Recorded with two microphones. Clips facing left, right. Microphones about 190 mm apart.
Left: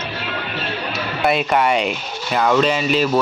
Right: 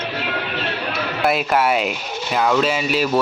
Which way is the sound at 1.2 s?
Centre (ahead or behind).